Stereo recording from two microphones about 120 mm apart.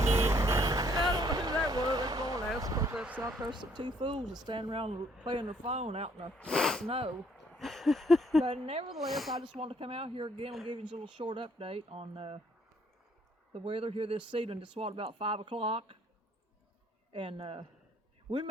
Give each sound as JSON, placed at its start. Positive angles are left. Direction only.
{"t": 0.0, "sound": "vehicle", "side_deg": -25}
{"t": 2.6, "sound": "a sound", "side_deg": -30}
{"t": 2.9, "sound": "a sound", "side_deg": -10}
{"t": 3.4, "sound": "speech", "side_deg": -40}
{"t": 5.2, "sound": "speech", "side_deg": -40}
{"t": 5.5, "sound": "speech", "side_deg": -70}
{"t": 6.3, "sound": "speech", "side_deg": 5}
{"t": 6.8, "sound": "speech", "side_deg": -50}
{"t": 7.5, "sound": "a sound", "side_deg": 0}
{"t": 8.4, "sound": "speech", "side_deg": -50}
{"t": 8.9, "sound": "speech", "side_deg": 0}
{"t": 9.4, "sound": "speech", "side_deg": -55}
{"t": 13.5, "sound": "speech", "side_deg": -50}
{"t": 17.1, "sound": "speech", "side_deg": -45}